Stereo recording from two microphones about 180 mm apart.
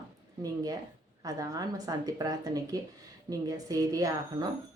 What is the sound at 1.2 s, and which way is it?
Speech, 20° right (ahead or behind).